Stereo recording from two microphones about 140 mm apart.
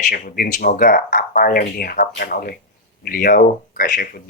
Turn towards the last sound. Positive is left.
turn(degrees=90)